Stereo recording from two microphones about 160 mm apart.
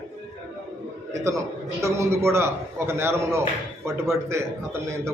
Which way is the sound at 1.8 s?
20° right (ahead or behind).